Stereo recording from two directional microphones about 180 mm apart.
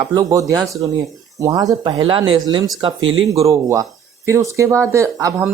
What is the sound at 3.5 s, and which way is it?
Speech, 20° right (ahead or behind).